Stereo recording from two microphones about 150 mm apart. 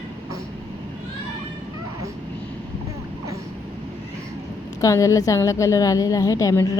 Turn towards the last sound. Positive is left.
turn(degrees=20)  # may be behind; listen again after turning